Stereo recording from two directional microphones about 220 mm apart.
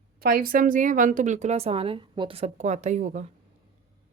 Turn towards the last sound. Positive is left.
turn(degrees=-35)  # may be behind; listen again after turning